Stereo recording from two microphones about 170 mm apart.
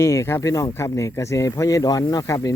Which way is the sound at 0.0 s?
15° left (ahead or behind).